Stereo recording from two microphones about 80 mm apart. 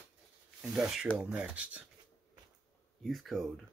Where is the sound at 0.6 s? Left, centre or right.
Centre.